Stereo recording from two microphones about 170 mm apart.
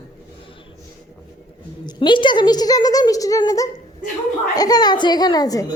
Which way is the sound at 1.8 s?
30° left (ahead or behind).